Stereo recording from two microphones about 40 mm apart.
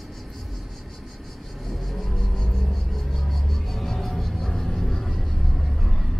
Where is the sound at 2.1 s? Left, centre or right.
Centre.